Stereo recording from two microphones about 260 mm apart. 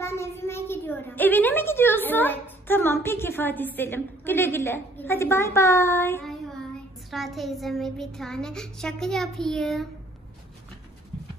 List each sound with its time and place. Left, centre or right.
0.0 s a child's voice: centre
7.1 s child singing: centre